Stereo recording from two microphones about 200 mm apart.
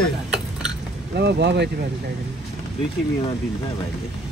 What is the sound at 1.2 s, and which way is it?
Speech, 55° right (ahead or behind).